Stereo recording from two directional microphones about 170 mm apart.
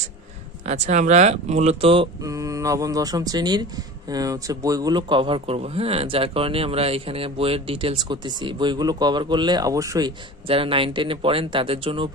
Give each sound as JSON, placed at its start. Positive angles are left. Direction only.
{"t": 0.7, "sound": "speech", "side_deg": -45}
{"t": 2.2, "sound": "speech", "side_deg": -20}